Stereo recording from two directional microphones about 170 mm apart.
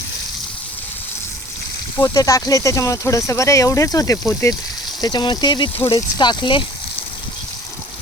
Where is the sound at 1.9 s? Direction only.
20° left (ahead or behind).